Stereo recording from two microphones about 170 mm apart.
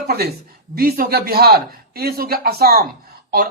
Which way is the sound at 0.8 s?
65° right (ahead or behind).